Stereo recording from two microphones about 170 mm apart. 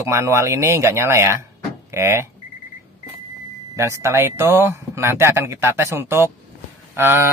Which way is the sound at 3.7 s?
15° right (ahead or behind).